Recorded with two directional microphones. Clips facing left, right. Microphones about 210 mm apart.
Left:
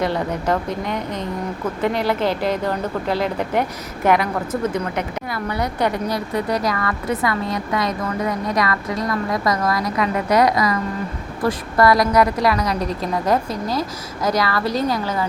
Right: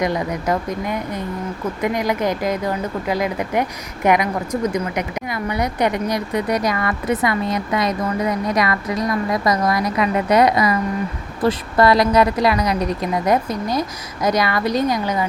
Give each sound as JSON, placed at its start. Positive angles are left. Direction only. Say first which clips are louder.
{"t": 0.0, "sound": "speech", "louder": "even", "side_deg": -10}